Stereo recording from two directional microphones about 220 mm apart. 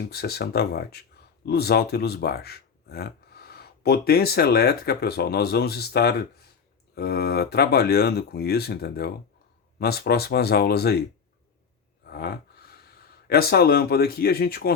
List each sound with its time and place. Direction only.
0.0 s speech: 45° left (ahead or behind)
12.0 s gasp: 45° left (ahead or behind)
13.2 s speech: 45° left (ahead or behind)